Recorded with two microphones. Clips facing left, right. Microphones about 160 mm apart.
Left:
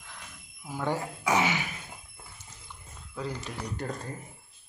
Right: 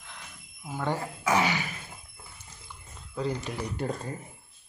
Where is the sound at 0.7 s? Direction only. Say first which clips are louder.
Even; 10° left (ahead or behind).